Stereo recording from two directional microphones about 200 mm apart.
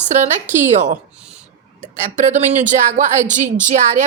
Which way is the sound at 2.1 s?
35° right (ahead or behind).